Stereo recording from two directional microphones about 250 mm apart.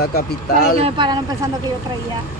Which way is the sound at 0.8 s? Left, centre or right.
Centre.